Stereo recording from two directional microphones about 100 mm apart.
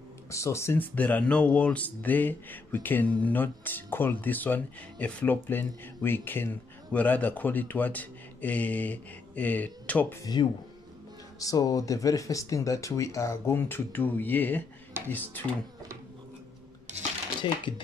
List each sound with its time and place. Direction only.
0.3 s speech: 30° left (ahead or behind)
11.3 s speech: 35° left (ahead or behind); by 15.4 s 20° left (ahead or behind)
17.4 s speech: 60° left (ahead or behind)